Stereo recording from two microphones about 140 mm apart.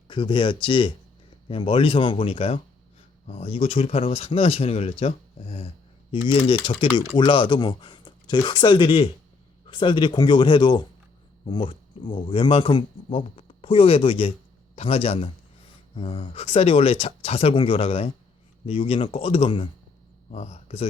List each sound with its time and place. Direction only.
0.1 s speech: 35° left (ahead or behind)